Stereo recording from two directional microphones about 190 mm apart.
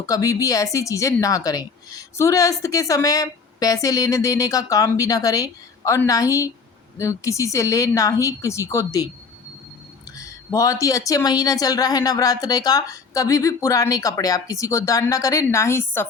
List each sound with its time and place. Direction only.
0.0 s speech: 15° left (ahead or behind)
10.2 s speech: 20° left (ahead or behind)